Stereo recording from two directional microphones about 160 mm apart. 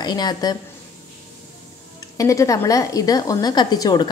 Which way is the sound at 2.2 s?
20° left (ahead or behind).